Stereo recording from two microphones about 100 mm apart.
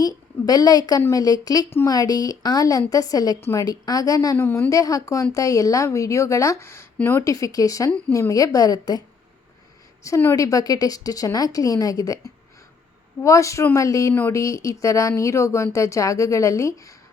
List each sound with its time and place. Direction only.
0.0 s a woman's voice: 40° left (ahead or behind)
4.4 s a woman's voice: 20° left (ahead or behind)
4.7 s speech: 35° left (ahead or behind)
7.3 s speech: 35° left (ahead or behind)
10.3 s speech: 35° left (ahead or behind)
13.2 s speech: 30° left (ahead or behind)
14.1 s a woman's voice: 20° left (ahead or behind)
14.3 s speech: 30° left (ahead or behind)